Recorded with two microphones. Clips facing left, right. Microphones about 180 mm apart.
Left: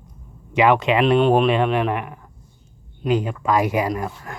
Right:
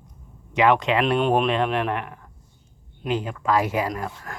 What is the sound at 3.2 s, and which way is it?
Speech, 10° left (ahead or behind).